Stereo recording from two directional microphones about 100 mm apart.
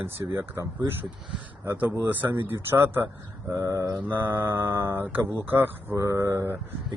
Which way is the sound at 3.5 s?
35° right (ahead or behind).